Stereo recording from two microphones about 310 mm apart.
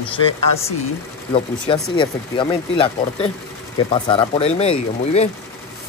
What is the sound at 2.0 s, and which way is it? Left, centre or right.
Speech, centre.